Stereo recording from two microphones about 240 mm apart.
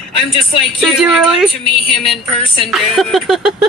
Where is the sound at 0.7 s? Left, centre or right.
Centre.